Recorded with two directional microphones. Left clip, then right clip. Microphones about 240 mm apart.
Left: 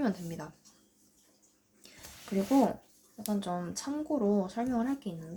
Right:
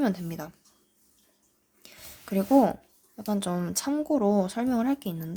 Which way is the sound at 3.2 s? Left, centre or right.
Right.